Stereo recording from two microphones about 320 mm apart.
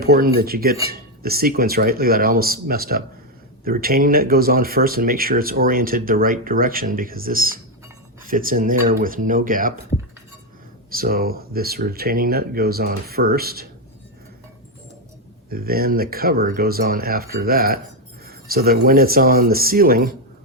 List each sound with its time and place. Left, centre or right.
0.0 s cutlery: right
0.3 s speech: right
10.9 s speech: right
15.4 s speech: right
18.3 s a sound: right
18.9 s speech: right